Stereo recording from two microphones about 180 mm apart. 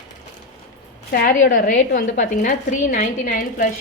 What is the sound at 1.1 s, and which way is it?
Speech, 50° left (ahead or behind).